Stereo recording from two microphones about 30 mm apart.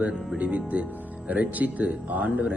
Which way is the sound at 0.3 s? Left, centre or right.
Right.